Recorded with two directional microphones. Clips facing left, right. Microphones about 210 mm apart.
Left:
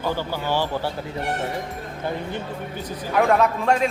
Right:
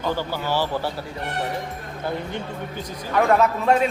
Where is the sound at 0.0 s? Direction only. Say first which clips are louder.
Even; 15° left (ahead or behind).